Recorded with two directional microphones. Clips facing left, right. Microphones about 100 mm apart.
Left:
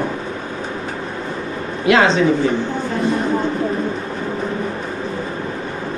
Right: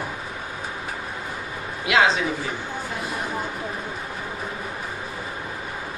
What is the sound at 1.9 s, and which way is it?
Speech, 10° right (ahead or behind).